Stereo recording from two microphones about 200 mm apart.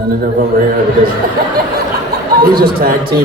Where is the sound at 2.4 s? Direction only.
45° right (ahead or behind).